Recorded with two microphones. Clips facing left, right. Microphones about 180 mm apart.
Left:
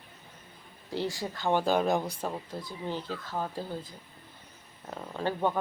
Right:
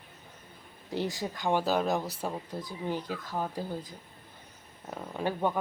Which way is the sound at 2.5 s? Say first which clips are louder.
Right 1 dB; 20° right (ahead or behind).